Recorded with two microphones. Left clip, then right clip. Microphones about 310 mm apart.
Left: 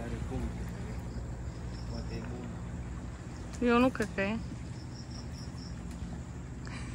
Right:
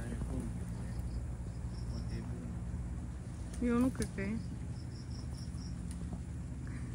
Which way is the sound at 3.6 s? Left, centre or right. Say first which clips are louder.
Left 8 dB; centre.